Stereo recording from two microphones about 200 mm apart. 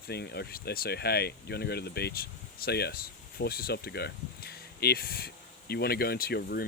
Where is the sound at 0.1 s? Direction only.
55° left (ahead or behind).